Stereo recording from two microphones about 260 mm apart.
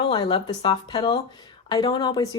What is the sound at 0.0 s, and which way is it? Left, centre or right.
Speech, centre.